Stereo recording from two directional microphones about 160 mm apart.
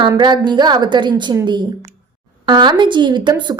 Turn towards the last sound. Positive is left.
turn(degrees=-30)  # may be behind; listen again after turning